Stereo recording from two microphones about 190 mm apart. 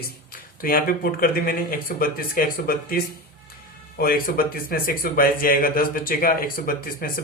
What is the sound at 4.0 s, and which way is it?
Speech, 50° left (ahead or behind).